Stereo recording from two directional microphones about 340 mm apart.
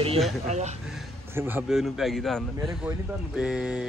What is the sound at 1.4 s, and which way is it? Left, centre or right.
Speech, centre.